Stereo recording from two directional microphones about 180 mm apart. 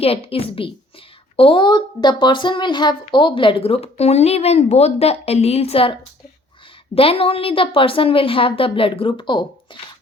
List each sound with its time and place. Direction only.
0.0 s a woman's voice: 30° left (ahead or behind)